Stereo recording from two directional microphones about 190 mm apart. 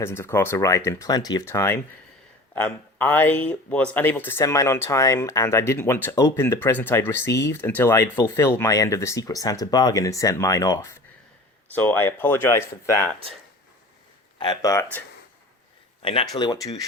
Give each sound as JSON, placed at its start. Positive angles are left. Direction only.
{"t": 0.0, "sound": "speech", "side_deg": 15}
{"t": 14.3, "sound": "speech", "side_deg": 20}
{"t": 16.3, "sound": "speech", "side_deg": 20}